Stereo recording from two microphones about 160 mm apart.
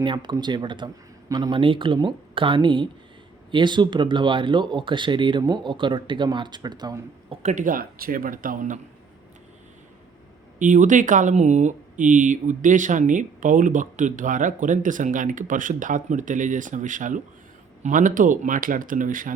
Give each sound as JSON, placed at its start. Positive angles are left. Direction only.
{"t": 0.0, "sound": "speech", "side_deg": -30}
{"t": 7.4, "sound": "speech", "side_deg": -55}
{"t": 10.6, "sound": "speech", "side_deg": -55}